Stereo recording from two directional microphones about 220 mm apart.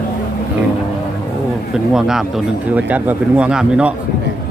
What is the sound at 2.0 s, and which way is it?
Speech, centre (ahead or behind).